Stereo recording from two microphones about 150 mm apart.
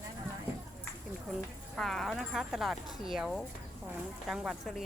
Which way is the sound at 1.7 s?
Centre (ahead or behind).